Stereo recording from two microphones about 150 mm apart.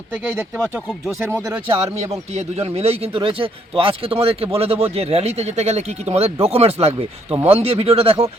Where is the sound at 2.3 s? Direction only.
40° right (ahead or behind).